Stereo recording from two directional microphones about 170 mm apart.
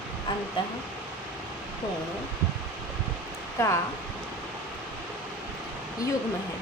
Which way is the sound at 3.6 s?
15° left (ahead or behind).